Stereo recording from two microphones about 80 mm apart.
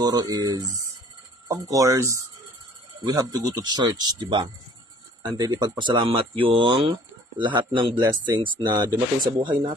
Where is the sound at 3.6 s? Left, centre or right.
Right.